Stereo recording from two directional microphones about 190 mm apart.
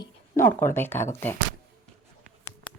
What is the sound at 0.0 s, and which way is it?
Speech, 15° left (ahead or behind).